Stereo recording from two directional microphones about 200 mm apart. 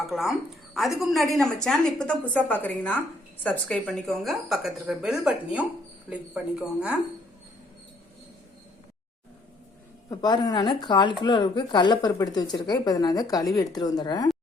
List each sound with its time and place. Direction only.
0.0 s a woman's voice: centre (ahead or behind)
10.1 s speech: 20° left (ahead or behind)